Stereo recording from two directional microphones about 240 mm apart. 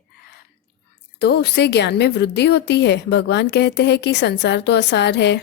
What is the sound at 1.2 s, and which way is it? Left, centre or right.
A woman's voice, left.